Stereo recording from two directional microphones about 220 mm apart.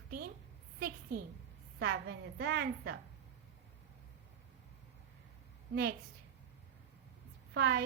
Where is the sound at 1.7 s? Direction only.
55° right (ahead or behind).